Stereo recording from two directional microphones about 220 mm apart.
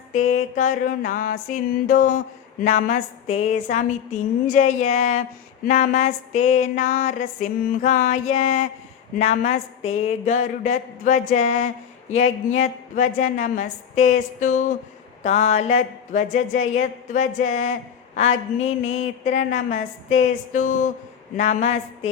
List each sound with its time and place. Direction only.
0.1 s a woman's voice: 30° left (ahead or behind)